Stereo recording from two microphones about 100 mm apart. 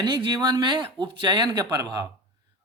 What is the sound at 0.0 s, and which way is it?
A man's voice, 50° right (ahead or behind).